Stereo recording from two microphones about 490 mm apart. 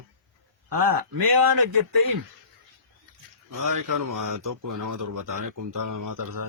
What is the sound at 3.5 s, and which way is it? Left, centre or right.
Speech, right.